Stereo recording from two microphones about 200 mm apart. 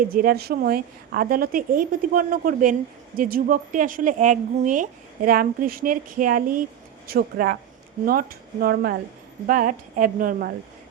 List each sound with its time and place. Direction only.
0.1 s speech: 45° right (ahead or behind)